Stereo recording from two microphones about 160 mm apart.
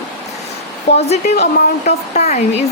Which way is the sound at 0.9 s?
90° left.